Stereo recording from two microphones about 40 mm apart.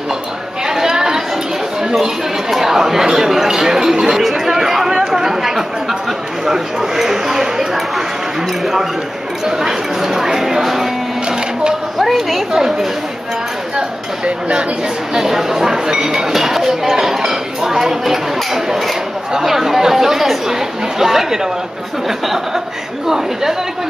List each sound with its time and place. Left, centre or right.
0.7 s chatter: centre
1.8 s a sound: centre
2.5 s speech: centre
9.6 s speech: centre
12.0 s speech: centre
13.7 s speech: right
15.1 s speech: centre
23.0 s speech: centre